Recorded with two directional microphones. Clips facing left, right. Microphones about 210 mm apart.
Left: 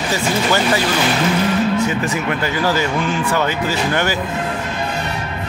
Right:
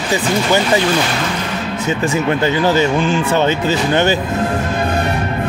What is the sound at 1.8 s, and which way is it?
Speech, 25° right (ahead or behind).